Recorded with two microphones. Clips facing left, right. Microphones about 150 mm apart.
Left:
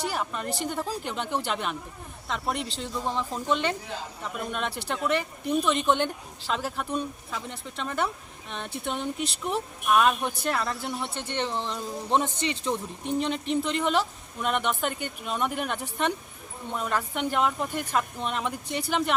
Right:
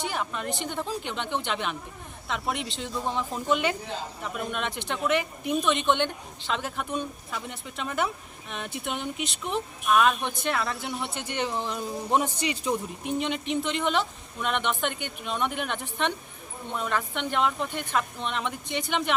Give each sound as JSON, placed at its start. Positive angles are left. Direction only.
{"t": 0.1, "sound": "speech", "side_deg": 0}
{"t": 11.1, "sound": "speech", "side_deg": 30}
{"t": 11.3, "sound": "speech", "side_deg": -5}